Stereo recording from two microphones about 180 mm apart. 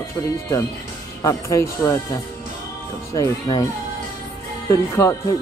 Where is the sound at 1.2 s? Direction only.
15° left (ahead or behind).